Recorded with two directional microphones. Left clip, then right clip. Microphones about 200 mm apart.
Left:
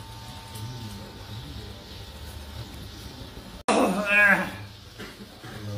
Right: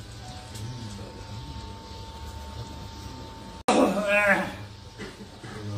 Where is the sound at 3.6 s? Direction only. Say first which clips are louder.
Right 1 dB; 40° left (ahead or behind).